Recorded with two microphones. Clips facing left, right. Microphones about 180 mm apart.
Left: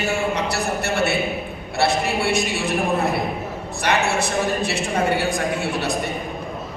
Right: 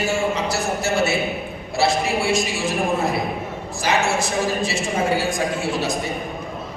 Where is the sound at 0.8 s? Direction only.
60° left (ahead or behind).